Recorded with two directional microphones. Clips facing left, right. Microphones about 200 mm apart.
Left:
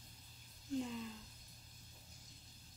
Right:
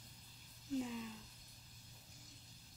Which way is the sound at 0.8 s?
5° right (ahead or behind).